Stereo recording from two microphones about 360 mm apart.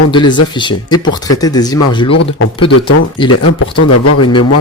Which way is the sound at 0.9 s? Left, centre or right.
Left.